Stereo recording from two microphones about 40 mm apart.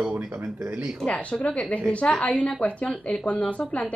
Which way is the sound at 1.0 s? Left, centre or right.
Left.